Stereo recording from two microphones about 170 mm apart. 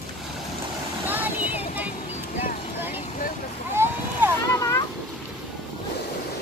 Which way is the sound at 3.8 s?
15° right (ahead or behind).